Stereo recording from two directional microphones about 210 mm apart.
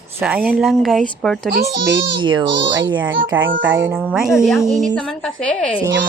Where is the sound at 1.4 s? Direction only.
50° right (ahead or behind).